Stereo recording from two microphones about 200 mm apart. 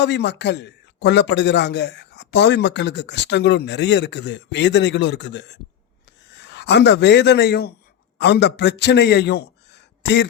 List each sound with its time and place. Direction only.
0.0 s a man's voice: 60° left (ahead or behind)